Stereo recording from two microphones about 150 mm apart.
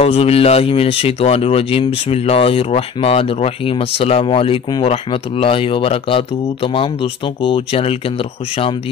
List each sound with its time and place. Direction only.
0.0 s speech: 40° left (ahead or behind)